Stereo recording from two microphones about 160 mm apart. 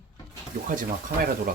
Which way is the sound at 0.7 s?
60° right (ahead or behind).